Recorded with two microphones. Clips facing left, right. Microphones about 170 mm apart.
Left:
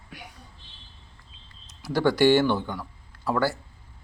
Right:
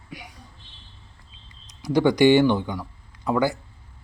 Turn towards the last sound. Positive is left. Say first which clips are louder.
# right 2 dB
turn(degrees=-15)  # may be behind; listen again after turning